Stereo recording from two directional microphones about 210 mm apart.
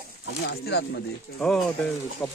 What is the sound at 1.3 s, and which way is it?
Speech, 5° left (ahead or behind).